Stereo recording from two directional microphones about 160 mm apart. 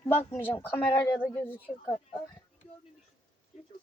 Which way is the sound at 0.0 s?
15° left (ahead or behind).